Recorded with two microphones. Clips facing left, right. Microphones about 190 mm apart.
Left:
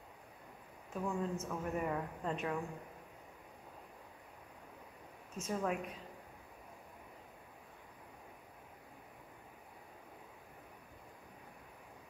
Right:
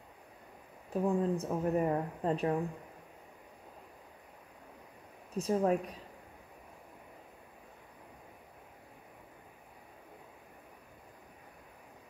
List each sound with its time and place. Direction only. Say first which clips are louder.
0.9 s speech: right 8 dB; 35° right (ahead or behind)
5.4 s speech: right 8 dB; 35° right (ahead or behind)